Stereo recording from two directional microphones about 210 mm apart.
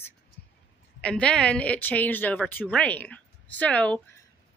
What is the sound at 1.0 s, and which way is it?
A woman's voice, 5° left (ahead or behind).